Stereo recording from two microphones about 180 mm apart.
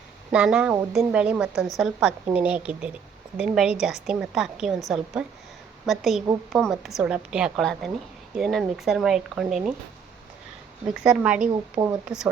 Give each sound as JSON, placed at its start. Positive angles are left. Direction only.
{"t": 0.3, "sound": "a woman's voice", "side_deg": -5}
{"t": 11.0, "sound": "a woman's voice", "side_deg": -5}